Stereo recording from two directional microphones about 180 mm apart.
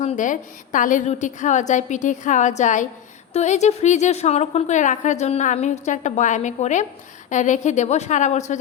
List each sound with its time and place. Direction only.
0.0 s a woman's voice: 40° left (ahead or behind)